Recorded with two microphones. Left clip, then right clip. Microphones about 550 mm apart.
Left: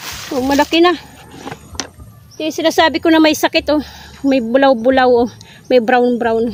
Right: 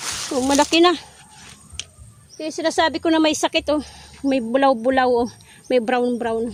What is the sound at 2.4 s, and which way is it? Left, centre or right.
Speech, right.